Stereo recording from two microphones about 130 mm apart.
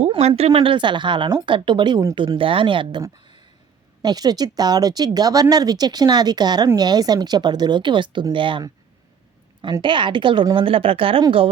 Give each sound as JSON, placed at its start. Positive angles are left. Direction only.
{"t": 0.1, "sound": "speech", "side_deg": -50}
{"t": 4.0, "sound": "speech", "side_deg": -30}
{"t": 9.8, "sound": "speech", "side_deg": -35}